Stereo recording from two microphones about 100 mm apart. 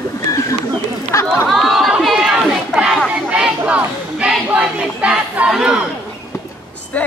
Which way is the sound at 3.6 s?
15° right (ahead or behind).